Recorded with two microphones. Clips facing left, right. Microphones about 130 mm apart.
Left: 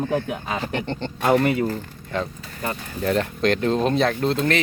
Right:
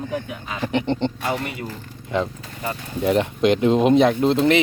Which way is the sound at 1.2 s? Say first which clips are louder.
Left 7 dB; 70° left (ahead or behind).